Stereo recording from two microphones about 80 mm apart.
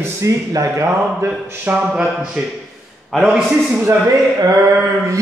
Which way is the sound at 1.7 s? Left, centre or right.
Centre.